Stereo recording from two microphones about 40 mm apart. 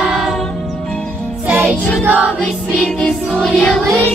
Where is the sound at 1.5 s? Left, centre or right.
Right.